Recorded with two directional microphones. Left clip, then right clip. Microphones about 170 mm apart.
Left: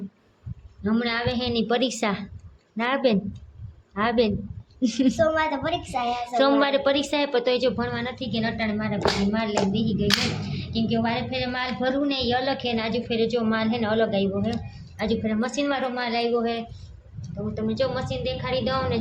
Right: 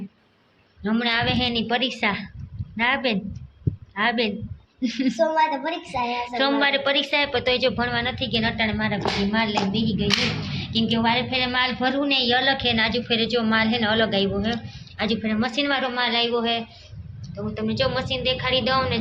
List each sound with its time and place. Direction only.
0.9 s a woman's voice: 15° left (ahead or behind); by 4.4 s 40° left (ahead or behind)
5.2 s a woman's voice: 25° left (ahead or behind)
7.8 s a woman's voice: centre (ahead or behind)